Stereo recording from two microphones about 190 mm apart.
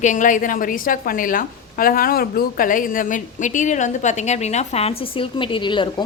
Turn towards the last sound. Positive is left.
turn(degrees=25)  # may be behind; listen again after turning